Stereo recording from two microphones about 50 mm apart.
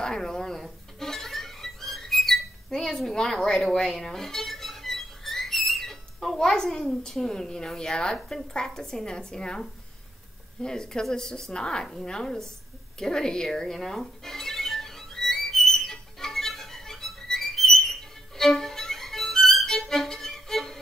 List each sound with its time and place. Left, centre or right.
0.0 s a sound: centre
0.6 s music: centre
3.0 s a woman's voice: centre
3.6 s a sound: centre
7.2 s a woman's voice: centre
13.0 s music: centre